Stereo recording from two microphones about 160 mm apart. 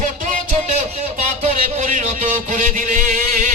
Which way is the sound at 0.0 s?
50° right (ahead or behind).